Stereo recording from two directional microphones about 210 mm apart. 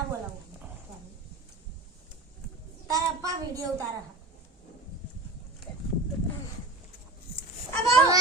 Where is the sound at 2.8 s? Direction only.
15° right (ahead or behind).